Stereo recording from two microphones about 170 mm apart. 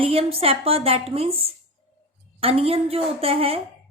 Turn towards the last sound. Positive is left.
turn(degrees=-35)  # may be behind; listen again after turning